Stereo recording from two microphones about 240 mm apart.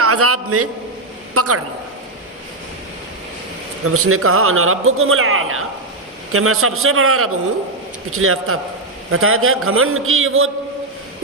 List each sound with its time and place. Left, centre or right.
0.0 s a man's voice: right
3.8 s speech: right